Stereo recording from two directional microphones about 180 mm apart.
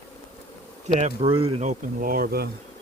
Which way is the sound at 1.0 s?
35° right (ahead or behind).